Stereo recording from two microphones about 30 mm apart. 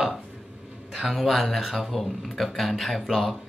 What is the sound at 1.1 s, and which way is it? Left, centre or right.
Speech, centre.